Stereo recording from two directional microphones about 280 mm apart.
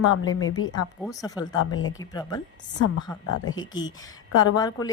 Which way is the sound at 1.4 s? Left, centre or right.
Centre.